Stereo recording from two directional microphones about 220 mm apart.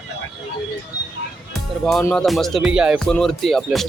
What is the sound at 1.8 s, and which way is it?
Music, 5° left (ahead or behind).